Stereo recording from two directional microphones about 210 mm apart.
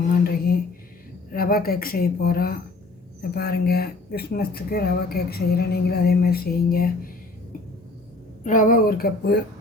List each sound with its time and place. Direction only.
0.3 s a sound: 45° left (ahead or behind)
1.3 s speech: 45° left (ahead or behind)
8.4 s speech: 40° left (ahead or behind)